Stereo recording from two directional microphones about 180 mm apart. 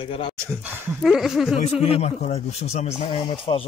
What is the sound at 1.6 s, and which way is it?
A man's voice, 35° left (ahead or behind).